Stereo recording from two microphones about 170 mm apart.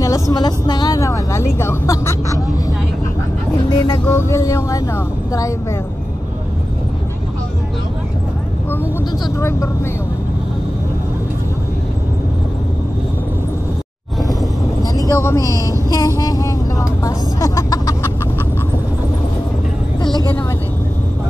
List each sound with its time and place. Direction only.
0.0 s speech: 20° left (ahead or behind)
3.7 s music: 25° left (ahead or behind)
4.0 s speech: 10° left (ahead or behind)
9.2 s speech: 15° left (ahead or behind)
14.8 s speech: 20° left (ahead or behind)